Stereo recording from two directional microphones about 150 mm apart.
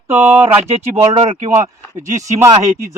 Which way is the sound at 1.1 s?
35° right (ahead or behind).